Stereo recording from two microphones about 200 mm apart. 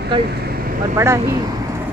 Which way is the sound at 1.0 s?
15° right (ahead or behind).